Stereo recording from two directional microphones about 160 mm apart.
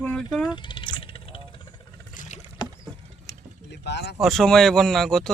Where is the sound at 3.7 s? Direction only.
90° left.